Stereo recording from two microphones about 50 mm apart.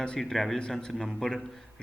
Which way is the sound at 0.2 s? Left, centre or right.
Centre.